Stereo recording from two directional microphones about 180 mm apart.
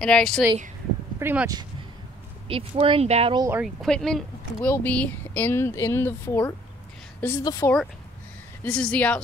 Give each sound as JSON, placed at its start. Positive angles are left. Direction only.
{"t": 0.0, "sound": "speech", "side_deg": 5}
{"t": 1.2, "sound": "speech", "side_deg": -10}
{"t": 2.4, "sound": "speech", "side_deg": -30}
{"t": 3.6, "sound": "speech", "side_deg": 0}